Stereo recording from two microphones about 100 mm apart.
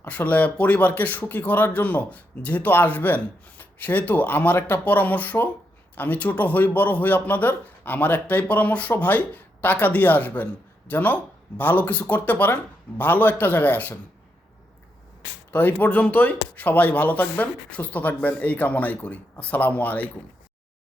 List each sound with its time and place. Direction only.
0.0 s speech: 15° left (ahead or behind)
15.5 s speech: 15° left (ahead or behind)